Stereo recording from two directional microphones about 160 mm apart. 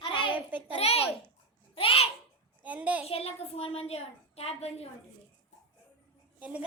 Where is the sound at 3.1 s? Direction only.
40° left (ahead or behind).